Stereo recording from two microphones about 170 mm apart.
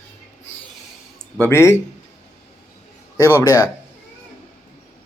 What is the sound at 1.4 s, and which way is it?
Speech, 15° left (ahead or behind).